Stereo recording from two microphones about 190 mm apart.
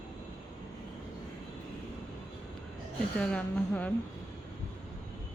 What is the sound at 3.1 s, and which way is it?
Speech, 5° left (ahead or behind).